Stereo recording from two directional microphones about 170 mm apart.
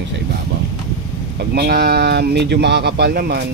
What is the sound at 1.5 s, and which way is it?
Speech, 65° right (ahead or behind).